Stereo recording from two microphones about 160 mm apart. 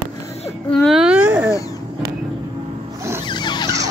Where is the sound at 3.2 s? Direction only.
30° left (ahead or behind).